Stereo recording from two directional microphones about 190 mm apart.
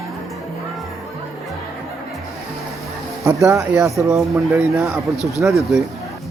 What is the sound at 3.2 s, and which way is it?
Speech, 15° right (ahead or behind).